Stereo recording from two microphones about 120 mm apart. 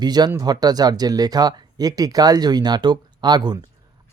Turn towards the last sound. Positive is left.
turn(degrees=-35)  # may be behind; listen again after turning